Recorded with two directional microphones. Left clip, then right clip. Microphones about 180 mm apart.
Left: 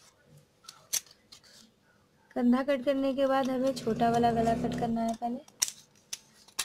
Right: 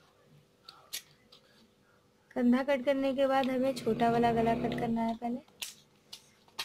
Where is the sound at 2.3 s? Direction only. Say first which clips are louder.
Left 1 dB; 30° left (ahead or behind).